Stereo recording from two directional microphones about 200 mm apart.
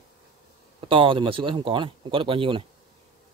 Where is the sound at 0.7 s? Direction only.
25° right (ahead or behind).